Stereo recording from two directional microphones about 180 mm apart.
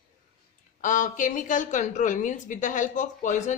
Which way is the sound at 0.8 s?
45° left (ahead or behind).